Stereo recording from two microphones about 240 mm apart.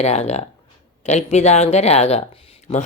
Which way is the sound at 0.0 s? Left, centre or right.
Left.